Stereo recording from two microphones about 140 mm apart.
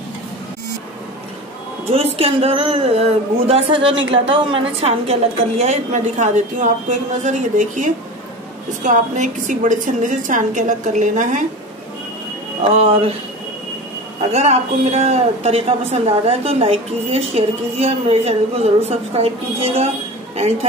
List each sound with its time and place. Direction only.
1.9 s a woman's voice: 45° right (ahead or behind)
5.6 s a woman's voice: 55° right (ahead or behind)
12.7 s a woman's voice: 45° right (ahead or behind)
14.3 s a woman's voice: 50° right (ahead or behind)